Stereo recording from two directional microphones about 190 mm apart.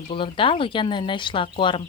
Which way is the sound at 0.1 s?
25° left (ahead or behind).